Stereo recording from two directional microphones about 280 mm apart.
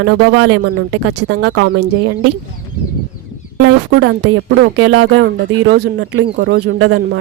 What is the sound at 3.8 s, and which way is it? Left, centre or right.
A woman's voice, right.